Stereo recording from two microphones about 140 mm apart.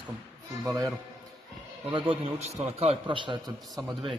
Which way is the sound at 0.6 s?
25° right (ahead or behind).